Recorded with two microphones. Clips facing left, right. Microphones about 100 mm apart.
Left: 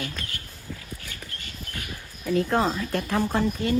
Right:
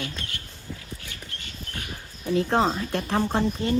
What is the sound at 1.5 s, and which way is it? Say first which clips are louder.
Bird: even; 35° right (ahead or behind).